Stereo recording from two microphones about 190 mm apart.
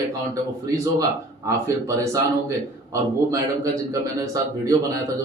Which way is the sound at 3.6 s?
15° right (ahead or behind).